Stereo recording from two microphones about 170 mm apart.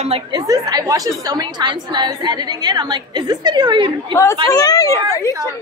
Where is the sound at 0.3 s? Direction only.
20° right (ahead or behind).